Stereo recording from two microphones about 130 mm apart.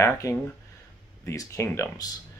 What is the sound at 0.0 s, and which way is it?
Speech, 20° left (ahead or behind).